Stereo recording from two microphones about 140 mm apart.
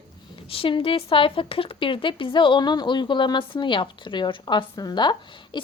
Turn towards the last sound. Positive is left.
turn(degrees=35)  # may be behind; listen again after turning